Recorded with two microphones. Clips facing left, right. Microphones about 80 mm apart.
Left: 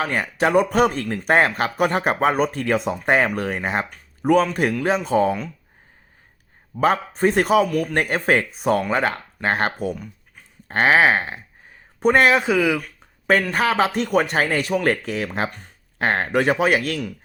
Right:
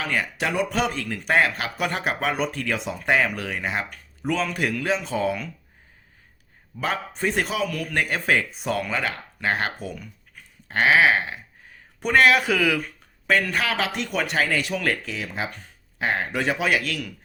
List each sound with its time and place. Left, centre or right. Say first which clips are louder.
0.0 s speech: left 5 dB; left
6.7 s a man's voice: left 8 dB; left
7.7 s speech: left 8 dB; left
7.9 s a man's voice: left 2 dB; left; by 12.8 s centre
13.5 s a man's voice: left 6 dB; left